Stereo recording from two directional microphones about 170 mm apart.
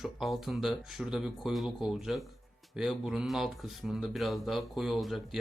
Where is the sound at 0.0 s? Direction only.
Centre (ahead or behind).